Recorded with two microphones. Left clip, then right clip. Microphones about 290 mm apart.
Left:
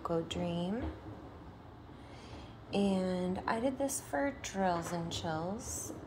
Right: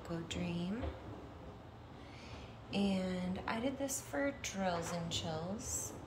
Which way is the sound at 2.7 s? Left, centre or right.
Centre.